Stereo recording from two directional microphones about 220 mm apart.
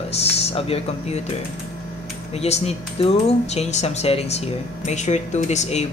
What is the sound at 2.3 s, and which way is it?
Speech, 30° left (ahead or behind).